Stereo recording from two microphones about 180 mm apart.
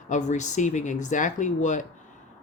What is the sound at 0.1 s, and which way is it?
Speech, 40° left (ahead or behind).